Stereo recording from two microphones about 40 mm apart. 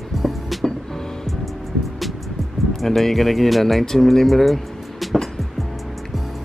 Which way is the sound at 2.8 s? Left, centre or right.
Centre.